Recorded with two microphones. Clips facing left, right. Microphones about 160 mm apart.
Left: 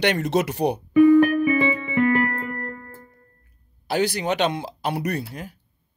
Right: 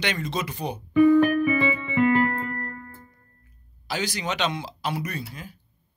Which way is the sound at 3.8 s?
60° left (ahead or behind).